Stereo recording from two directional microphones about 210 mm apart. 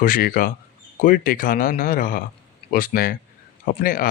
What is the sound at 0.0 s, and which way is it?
Speech, 40° left (ahead or behind).